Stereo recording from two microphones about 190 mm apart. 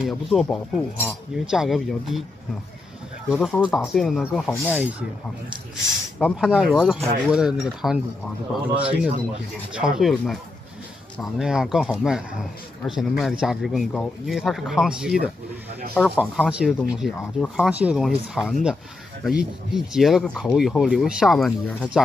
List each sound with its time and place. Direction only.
0.0 s speech: centre (ahead or behind)
3.3 s speech: centre (ahead or behind)
6.1 s speech: centre (ahead or behind)
9.8 s speech: centre (ahead or behind)